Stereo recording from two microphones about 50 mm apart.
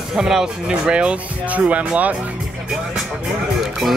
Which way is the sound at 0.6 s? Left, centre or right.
Centre.